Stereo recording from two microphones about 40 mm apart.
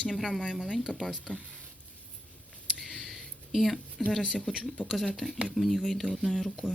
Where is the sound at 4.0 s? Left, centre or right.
Centre.